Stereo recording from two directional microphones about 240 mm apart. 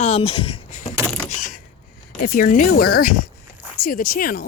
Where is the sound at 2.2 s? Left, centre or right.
Left.